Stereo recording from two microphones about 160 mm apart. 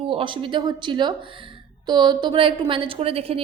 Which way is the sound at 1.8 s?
25° right (ahead or behind).